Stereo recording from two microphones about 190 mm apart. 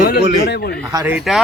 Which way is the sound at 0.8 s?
15° right (ahead or behind).